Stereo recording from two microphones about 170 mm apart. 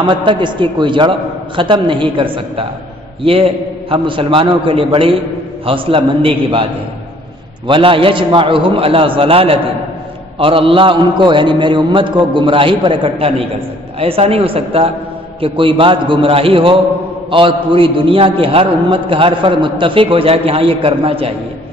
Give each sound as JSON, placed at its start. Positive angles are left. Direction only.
{"t": 0.0, "sound": "a man's voice", "side_deg": -30}